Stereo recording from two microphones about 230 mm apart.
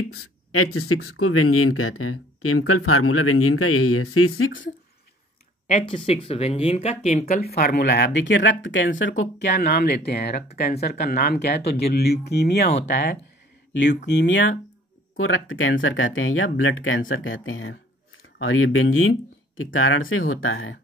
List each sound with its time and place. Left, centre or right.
0.2 s a sound: left
0.7 s speech: left
5.7 s speech: left